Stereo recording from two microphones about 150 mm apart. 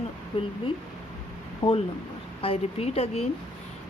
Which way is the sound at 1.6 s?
40° left (ahead or behind).